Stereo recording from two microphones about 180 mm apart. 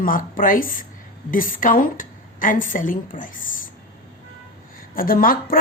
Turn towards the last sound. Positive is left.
turn(degrees=50)  # may be behind; listen again after turning